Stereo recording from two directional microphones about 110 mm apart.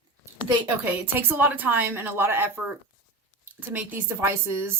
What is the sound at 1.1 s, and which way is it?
A woman's voice, 20° right (ahead or behind).